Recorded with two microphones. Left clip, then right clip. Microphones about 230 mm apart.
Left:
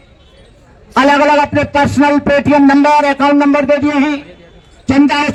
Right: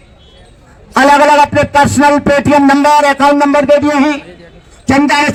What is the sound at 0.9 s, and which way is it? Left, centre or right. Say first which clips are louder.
A man's voice: right 3 dB; right.